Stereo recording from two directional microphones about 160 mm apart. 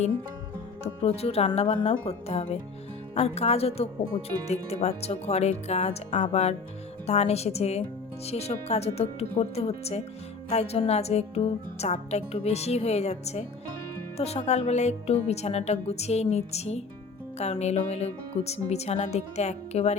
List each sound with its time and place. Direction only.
1.0 s speech: 40° left (ahead or behind)